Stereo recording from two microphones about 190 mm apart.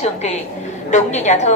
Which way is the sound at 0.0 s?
35° left (ahead or behind).